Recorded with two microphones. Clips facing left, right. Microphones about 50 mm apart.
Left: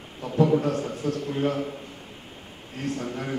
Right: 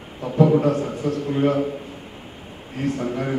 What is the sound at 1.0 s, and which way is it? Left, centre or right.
Speech, right.